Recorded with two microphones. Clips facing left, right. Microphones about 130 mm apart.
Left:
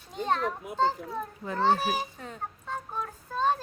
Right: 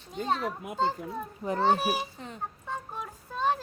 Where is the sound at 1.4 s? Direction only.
20° right (ahead or behind).